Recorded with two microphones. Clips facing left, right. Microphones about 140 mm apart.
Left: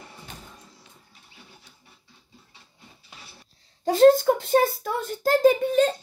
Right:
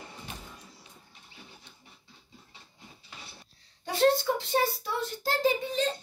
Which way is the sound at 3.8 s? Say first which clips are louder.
Left 9 dB; 45° left (ahead or behind).